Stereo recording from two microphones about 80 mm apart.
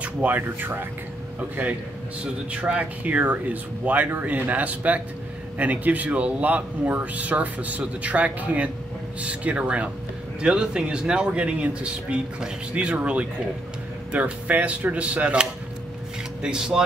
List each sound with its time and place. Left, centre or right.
0.0 s speech: right
16.4 s speech: centre